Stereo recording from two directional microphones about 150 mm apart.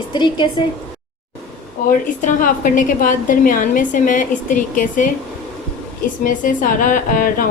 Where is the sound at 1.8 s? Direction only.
60° left (ahead or behind).